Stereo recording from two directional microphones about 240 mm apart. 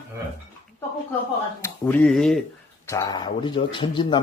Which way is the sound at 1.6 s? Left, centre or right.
Centre.